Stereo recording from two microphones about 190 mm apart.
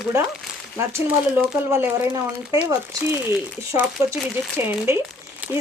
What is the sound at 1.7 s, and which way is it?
Speech, 15° right (ahead or behind).